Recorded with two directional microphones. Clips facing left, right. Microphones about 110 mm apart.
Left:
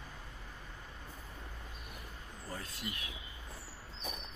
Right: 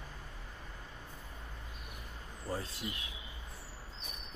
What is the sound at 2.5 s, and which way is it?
Vehicle, 30° right (ahead or behind).